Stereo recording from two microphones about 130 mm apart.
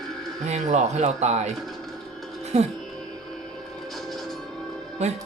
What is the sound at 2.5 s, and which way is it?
Speech, 55° right (ahead or behind).